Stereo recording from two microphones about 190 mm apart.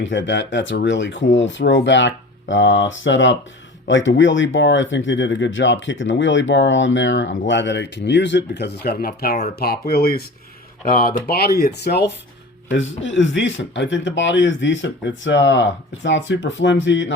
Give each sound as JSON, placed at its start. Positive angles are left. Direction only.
{"t": 0.0, "sound": "speech", "side_deg": 70}
{"t": 12.7, "sound": "speech", "side_deg": 80}